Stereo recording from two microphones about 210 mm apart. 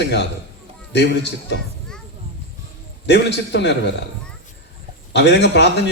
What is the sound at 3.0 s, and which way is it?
Speech, 55° left (ahead or behind).